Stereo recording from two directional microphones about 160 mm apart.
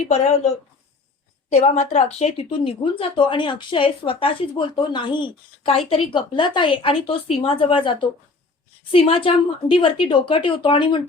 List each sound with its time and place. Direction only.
1.5 s speech: 45° left (ahead or behind)